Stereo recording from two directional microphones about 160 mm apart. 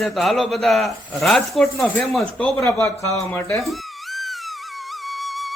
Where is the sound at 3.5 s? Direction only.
Centre (ahead or behind).